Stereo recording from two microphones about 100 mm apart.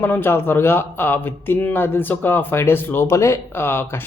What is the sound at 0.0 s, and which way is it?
Speech, 20° left (ahead or behind).